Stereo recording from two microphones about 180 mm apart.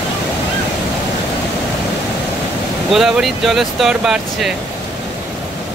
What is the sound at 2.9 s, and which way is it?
Speech, centre (ahead or behind).